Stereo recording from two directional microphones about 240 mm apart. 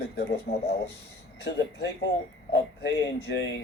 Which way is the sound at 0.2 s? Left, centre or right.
Left.